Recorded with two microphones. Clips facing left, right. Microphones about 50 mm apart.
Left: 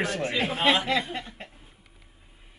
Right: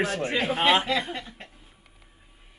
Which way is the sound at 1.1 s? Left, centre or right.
Left.